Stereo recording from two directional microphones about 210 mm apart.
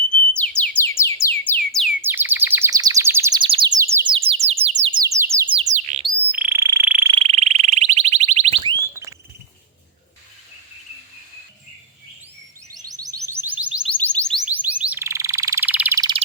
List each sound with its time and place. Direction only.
0.3 s music: 5° left (ahead or behind)
2.0 s bird: 10° right (ahead or behind)
3.4 s chirp: 25° right (ahead or behind)
3.9 s bird: 25° right (ahead or behind)
4.9 s bird: 15° right (ahead or behind)
5.5 s bird: 30° right (ahead or behind)
6.2 s bird: 10° right (ahead or behind)
7.1 s alarm: 25° right (ahead or behind)
12.7 s music: 15° right (ahead or behind)
13.9 s music: 5° left (ahead or behind)
14.4 s alarm: 5° right (ahead or behind)